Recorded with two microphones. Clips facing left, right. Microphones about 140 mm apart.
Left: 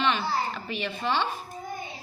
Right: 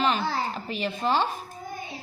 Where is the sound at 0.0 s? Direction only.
40° right (ahead or behind).